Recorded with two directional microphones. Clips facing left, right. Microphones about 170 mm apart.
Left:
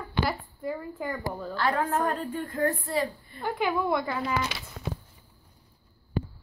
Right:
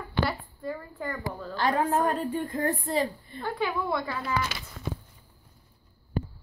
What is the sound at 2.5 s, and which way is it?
Speech, 25° right (ahead or behind).